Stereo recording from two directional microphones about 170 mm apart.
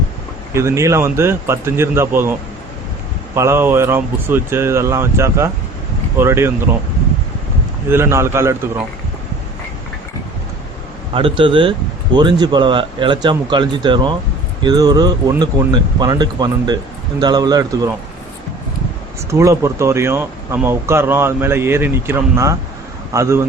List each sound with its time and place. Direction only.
0.5 s speech: 15° right (ahead or behind)
3.3 s speech: 15° right (ahead or behind)
7.9 s speech: 15° right (ahead or behind)
11.1 s speech: 30° right (ahead or behind)
19.3 s speech: 15° right (ahead or behind)